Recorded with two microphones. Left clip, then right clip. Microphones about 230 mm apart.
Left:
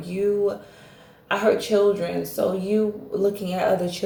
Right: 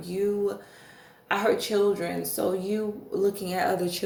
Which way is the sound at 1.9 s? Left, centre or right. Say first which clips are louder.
Left 4 dB; right.